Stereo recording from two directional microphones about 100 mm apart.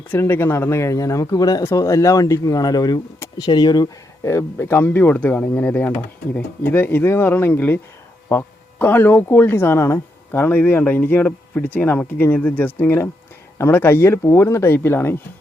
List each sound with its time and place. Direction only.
0.1 s speech: 20° left (ahead or behind)